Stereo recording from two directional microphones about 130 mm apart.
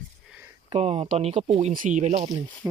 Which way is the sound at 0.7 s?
50° right (ahead or behind).